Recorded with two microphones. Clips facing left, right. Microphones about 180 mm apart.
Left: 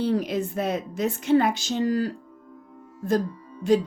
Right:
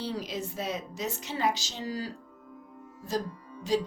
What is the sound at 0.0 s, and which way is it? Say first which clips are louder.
Speech: left 10 dB; 55° left (ahead or behind).